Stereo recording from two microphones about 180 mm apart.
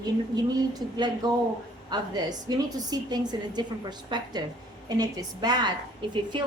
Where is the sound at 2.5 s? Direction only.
20° right (ahead or behind).